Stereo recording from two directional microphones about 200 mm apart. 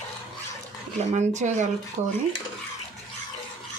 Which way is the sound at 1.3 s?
35° right (ahead or behind).